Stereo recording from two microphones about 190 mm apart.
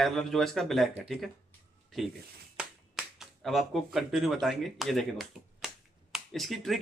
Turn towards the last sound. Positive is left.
turn(degrees=0)  # may be behind; listen again after turning